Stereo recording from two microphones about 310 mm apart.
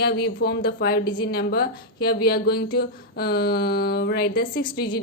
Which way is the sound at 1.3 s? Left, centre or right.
Left.